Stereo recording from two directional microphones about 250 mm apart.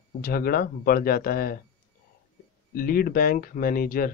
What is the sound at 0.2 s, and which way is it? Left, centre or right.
Speech, left.